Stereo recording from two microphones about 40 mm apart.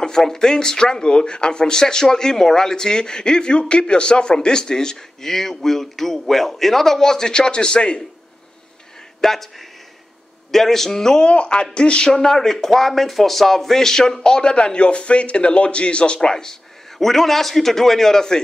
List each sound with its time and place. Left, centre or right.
0.0 s speech: centre
9.2 s speech: centre
11.2 s speech: left
17.0 s speech: centre